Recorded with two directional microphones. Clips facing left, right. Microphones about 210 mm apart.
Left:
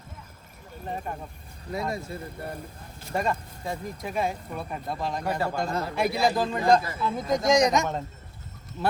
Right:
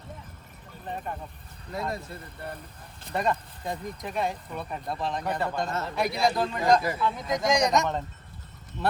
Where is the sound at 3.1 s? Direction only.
Centre (ahead or behind).